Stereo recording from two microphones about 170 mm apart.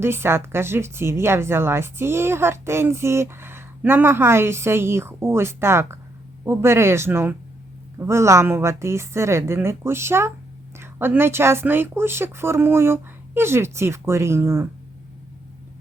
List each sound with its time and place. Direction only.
0.0 s speech: 15° right (ahead or behind)